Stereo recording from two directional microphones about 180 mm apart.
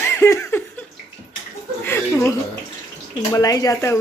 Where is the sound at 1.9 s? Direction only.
15° left (ahead or behind).